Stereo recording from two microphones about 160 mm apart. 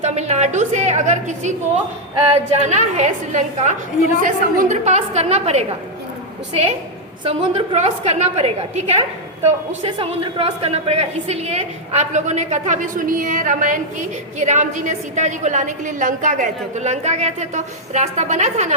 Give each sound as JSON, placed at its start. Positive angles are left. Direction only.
{"t": 0.0, "sound": "a woman's voice", "side_deg": -45}
{"t": 7.3, "sound": "a woman's voice", "side_deg": -35}